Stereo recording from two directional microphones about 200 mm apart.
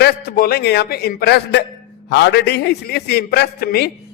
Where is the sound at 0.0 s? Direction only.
50° left (ahead or behind).